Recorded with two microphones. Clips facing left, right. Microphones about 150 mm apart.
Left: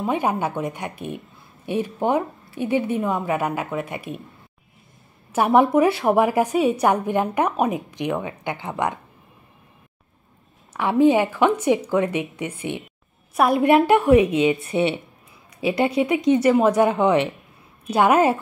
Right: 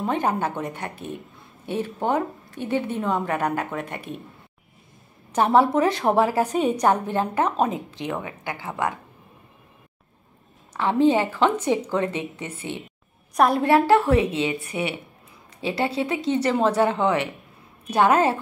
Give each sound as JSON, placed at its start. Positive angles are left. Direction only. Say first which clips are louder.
{"t": 0.0, "sound": "a woman's voice", "louder": "left 1 dB", "side_deg": 10}
{"t": 5.3, "sound": "a woman's voice", "louder": "left 2 dB", "side_deg": 15}
{"t": 10.7, "sound": "a woman's voice", "louder": "left 2 dB", "side_deg": 10}